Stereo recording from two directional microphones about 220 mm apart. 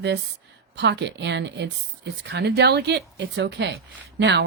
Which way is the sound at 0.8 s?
50° right (ahead or behind).